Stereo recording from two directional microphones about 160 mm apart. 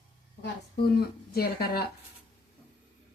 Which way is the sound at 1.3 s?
75° left (ahead or behind).